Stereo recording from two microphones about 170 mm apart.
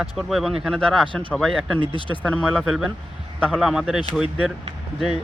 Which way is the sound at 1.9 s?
30° left (ahead or behind).